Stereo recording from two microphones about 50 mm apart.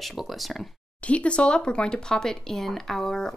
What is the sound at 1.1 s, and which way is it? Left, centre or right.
Speech, left.